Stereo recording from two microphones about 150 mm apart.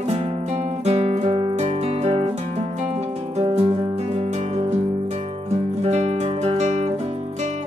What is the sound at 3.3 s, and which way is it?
Music, 45° right (ahead or behind).